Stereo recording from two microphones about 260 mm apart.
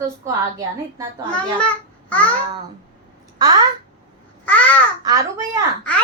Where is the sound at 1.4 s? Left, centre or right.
Centre.